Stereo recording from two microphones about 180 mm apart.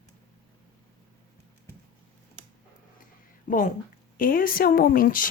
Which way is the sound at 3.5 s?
45° left (ahead or behind).